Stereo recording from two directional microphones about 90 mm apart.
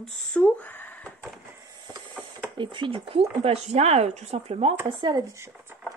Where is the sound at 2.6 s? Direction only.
65° right (ahead or behind); by 3.6 s 90° right.